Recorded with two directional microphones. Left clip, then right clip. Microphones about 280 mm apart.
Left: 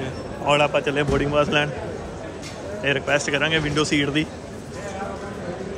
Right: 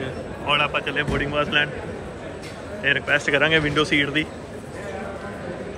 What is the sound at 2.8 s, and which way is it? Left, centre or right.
Speech, centre.